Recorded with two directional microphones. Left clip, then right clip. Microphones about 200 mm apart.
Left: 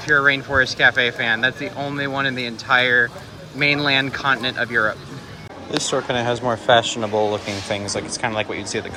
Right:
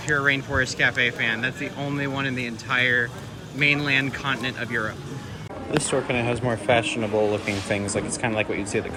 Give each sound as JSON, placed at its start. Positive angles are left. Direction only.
{"t": 0.0, "sound": "speech", "side_deg": 10}
{"t": 7.3, "sound": "speech", "side_deg": 5}